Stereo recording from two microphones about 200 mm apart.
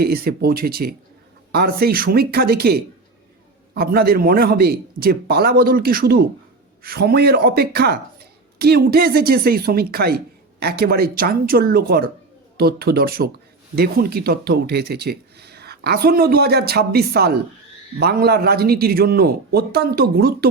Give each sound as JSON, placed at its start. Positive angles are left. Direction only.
{"t": 0.0, "sound": "speech", "side_deg": -50}